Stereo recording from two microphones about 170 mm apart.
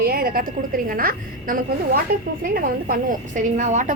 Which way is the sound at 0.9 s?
55° right (ahead or behind).